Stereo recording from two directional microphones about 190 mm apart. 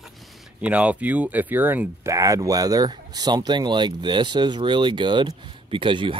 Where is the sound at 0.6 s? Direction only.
5° right (ahead or behind).